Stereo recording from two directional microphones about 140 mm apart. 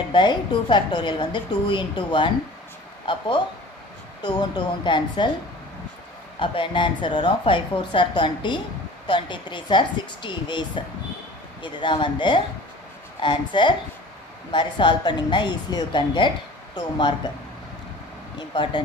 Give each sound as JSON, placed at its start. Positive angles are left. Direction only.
{"t": 0.1, "sound": "a woman's voice", "side_deg": 35}
{"t": 6.4, "sound": "a woman's voice", "side_deg": 35}
{"t": 18.3, "sound": "a woman's voice", "side_deg": 35}